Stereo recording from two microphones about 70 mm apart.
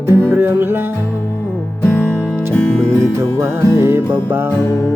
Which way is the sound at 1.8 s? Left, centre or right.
Left.